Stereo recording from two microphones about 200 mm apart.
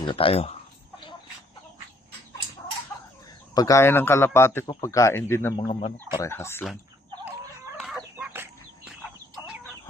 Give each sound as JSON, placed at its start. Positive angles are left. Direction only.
{"t": 0.1, "sound": "speech", "side_deg": 25}
{"t": 3.5, "sound": "speech", "side_deg": 15}
{"t": 5.5, "sound": "speech", "side_deg": 25}
{"t": 7.8, "sound": "chicken", "side_deg": 0}